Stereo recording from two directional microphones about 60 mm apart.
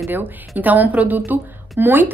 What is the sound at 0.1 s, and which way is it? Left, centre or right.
A woman's voice, right.